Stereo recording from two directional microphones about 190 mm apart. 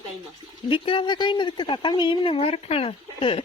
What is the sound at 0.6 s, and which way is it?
Speech, 25° left (ahead or behind).